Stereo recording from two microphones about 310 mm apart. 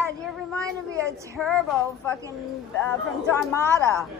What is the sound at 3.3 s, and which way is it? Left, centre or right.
Speech, centre.